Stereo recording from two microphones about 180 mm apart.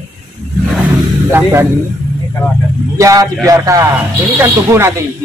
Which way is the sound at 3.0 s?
20° right (ahead or behind).